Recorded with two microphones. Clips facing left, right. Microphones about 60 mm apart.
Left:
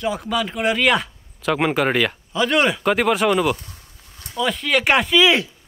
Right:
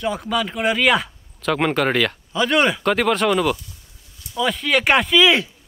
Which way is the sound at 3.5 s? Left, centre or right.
Left.